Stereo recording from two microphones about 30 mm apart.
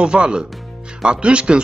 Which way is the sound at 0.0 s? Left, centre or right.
Right.